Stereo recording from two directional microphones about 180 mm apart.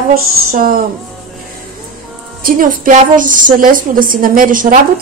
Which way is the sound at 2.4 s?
50° right (ahead or behind).